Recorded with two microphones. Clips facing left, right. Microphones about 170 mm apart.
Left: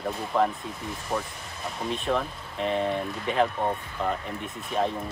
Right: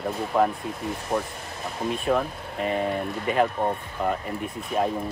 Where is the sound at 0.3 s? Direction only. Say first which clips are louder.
Right 2 dB; 5° right (ahead or behind).